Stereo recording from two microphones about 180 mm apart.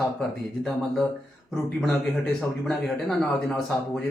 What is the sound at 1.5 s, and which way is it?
Speech, 5° left (ahead or behind).